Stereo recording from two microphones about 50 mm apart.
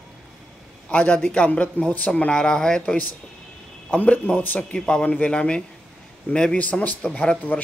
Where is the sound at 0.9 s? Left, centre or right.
Left.